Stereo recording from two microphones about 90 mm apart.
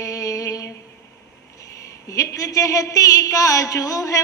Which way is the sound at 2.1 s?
40° left (ahead or behind).